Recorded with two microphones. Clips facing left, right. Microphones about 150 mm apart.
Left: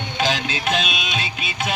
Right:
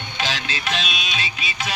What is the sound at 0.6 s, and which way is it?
Music, 55° left (ahead or behind).